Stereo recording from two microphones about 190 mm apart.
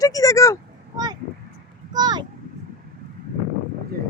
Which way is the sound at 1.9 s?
20° right (ahead or behind).